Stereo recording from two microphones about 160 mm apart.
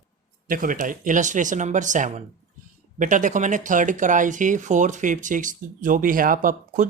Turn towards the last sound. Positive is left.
turn(degrees=-60)  # may be behind; listen again after turning